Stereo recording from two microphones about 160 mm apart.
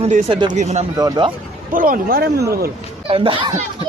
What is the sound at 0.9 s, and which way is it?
Speech, 25° right (ahead or behind).